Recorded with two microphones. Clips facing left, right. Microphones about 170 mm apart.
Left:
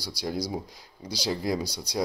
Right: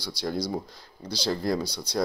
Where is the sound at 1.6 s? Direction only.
40° left (ahead or behind).